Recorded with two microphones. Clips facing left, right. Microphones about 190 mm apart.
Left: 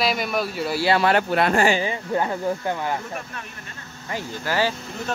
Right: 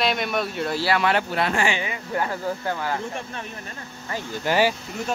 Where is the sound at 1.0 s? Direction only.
50° left (ahead or behind); by 2.9 s 20° left (ahead or behind).